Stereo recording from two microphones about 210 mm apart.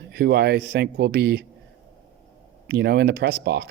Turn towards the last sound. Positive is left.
turn(degrees=-50)  # may be behind; listen again after turning